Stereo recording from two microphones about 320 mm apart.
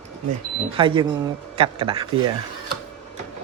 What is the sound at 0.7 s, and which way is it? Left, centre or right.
Speech, centre.